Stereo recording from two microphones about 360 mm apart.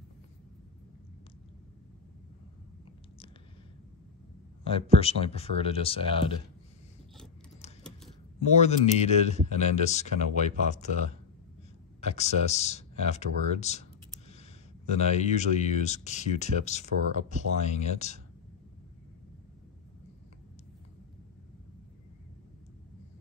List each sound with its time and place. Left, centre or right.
4.6 s speech: centre
8.5 s speech: centre
15.1 s speech: centre